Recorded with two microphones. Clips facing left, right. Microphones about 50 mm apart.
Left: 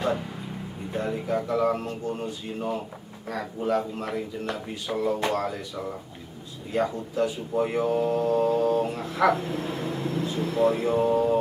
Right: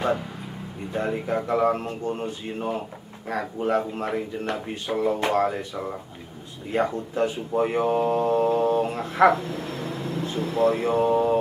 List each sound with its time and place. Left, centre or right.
0.0 s a sound: centre
0.9 s speech: right
9.5 s speech: centre
9.8 s vehicle: centre
10.4 s speech: centre
10.8 s speech: centre